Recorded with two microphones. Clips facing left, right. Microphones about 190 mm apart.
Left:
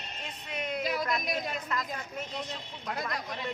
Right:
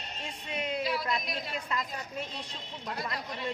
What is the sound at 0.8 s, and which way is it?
Speech, 45° left (ahead or behind).